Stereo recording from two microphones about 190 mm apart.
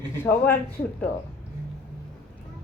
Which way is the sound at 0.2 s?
10° left (ahead or behind).